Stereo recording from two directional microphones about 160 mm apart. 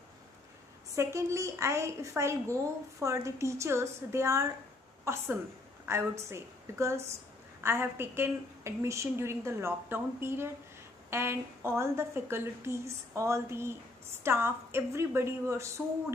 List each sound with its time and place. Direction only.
0.9 s a woman's voice: 20° right (ahead or behind)